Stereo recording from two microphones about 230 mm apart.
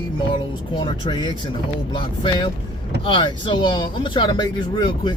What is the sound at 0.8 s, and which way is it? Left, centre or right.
Speech, centre.